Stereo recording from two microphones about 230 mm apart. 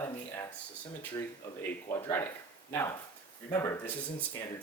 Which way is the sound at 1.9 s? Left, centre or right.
Centre.